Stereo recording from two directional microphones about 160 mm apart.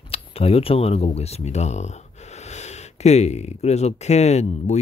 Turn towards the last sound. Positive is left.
turn(degrees=45)  # may be behind; listen again after turning